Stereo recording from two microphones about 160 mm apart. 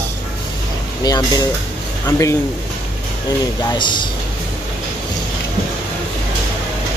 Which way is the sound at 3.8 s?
30° left (ahead or behind).